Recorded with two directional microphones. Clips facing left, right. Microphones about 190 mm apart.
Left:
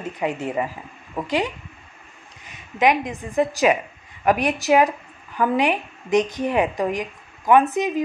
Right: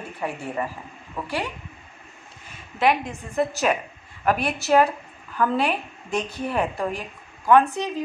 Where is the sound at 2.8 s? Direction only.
15° left (ahead or behind).